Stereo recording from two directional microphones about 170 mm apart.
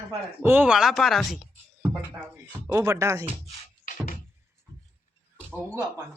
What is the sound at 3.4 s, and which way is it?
Music, 50° left (ahead or behind).